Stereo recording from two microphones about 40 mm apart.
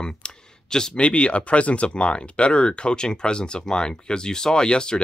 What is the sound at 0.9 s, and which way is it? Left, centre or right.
Speech, left.